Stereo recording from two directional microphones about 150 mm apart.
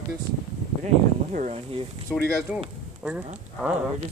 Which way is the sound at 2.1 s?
5° left (ahead or behind).